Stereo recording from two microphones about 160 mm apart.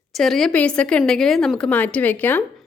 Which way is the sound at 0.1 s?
Centre (ahead or behind).